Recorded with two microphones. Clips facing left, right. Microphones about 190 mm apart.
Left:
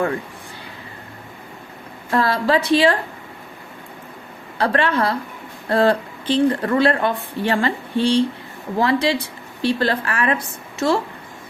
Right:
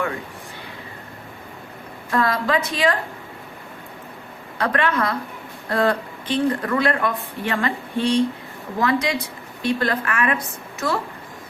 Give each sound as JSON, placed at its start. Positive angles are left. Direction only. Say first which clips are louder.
{"t": 2.0, "sound": "speech", "louder": "left 3 dB", "side_deg": 30}
{"t": 4.5, "sound": "speech", "louder": "left 2 dB", "side_deg": 30}